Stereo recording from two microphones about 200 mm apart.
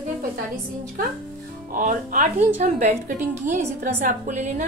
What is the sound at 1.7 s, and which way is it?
A woman's voice, 40° right (ahead or behind).